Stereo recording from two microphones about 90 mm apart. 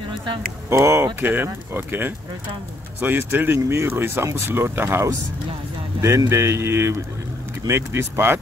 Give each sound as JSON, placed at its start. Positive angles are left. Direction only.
{"t": 0.1, "sound": "a sound", "side_deg": -65}
{"t": 0.7, "sound": "speech", "side_deg": -30}
{"t": 1.2, "sound": "speech", "side_deg": -20}